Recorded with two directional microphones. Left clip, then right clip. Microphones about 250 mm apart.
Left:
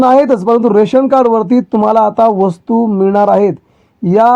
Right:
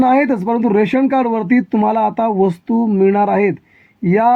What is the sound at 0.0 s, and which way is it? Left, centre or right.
Speech, left.